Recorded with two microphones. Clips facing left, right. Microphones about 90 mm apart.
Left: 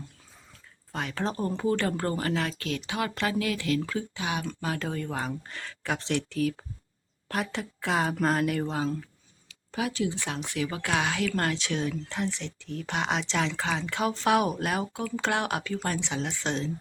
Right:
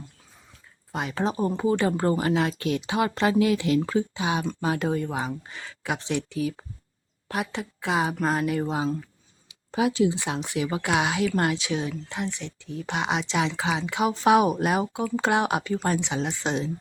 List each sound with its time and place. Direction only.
0.9 s speech: 20° right (ahead or behind)
8.6 s speech: 15° right (ahead or behind)